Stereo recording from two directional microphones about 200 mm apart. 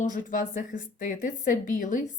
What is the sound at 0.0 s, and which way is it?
A woman's voice, 40° left (ahead or behind).